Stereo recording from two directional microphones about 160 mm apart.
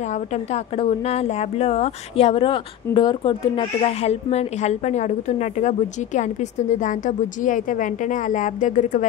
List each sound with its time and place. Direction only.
0.5 s a woman's voice: 40° left (ahead or behind)